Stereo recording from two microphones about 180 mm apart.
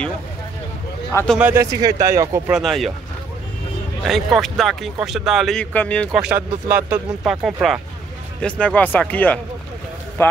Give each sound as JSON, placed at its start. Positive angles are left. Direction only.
{"t": 1.1, "sound": "speech", "side_deg": 5}
{"t": 1.4, "sound": "speech", "side_deg": -15}
{"t": 2.5, "sound": "speech", "side_deg": 0}
{"t": 4.0, "sound": "speech", "side_deg": 0}
{"t": 6.1, "sound": "speech", "side_deg": -5}